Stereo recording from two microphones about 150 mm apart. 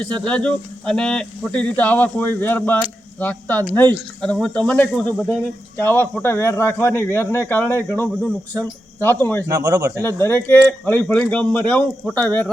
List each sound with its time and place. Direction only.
0.0 s speech: 5° left (ahead or behind)
9.5 s speech: 25° right (ahead or behind)
10.0 s speech: 15° left (ahead or behind)